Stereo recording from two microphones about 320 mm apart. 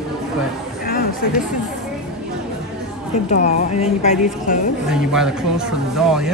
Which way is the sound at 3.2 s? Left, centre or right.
Left.